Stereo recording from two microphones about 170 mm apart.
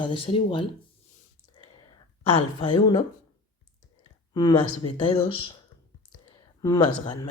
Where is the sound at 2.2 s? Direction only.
30° left (ahead or behind).